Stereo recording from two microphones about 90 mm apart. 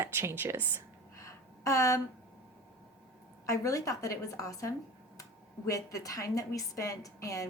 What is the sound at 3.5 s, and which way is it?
A woman's voice, 40° left (ahead or behind).